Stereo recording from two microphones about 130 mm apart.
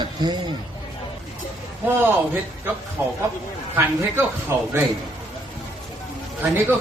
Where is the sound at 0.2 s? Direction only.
35° right (ahead or behind).